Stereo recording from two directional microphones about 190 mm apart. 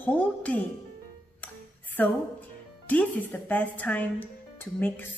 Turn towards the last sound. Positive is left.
turn(degrees=10)  # may be behind; listen again after turning